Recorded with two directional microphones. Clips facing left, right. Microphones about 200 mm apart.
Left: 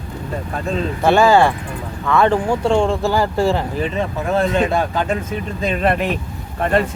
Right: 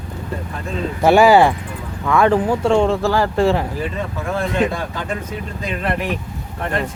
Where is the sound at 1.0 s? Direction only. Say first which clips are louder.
Right 2 dB; 15° right (ahead or behind); by 3.6 s centre (ahead or behind).